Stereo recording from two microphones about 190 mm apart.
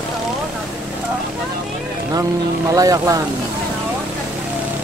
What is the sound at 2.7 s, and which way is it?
Speech, 15° right (ahead or behind).